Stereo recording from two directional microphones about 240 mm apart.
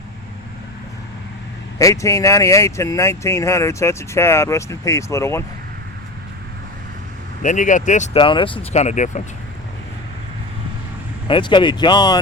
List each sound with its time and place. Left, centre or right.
1.8 s speech: centre
7.4 s speech: left
11.3 s speech: centre